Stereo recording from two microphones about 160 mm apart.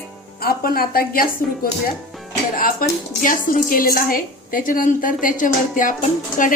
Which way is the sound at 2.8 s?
60° left (ahead or behind).